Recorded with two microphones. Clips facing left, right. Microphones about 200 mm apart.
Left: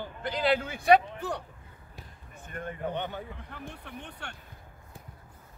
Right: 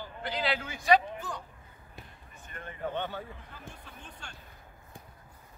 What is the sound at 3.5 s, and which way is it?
Speech, 65° left (ahead or behind).